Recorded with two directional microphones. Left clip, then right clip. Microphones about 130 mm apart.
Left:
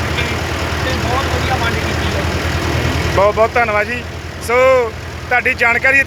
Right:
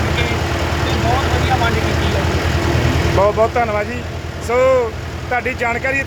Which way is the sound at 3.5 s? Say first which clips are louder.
Left 3 dB; 10° right (ahead or behind).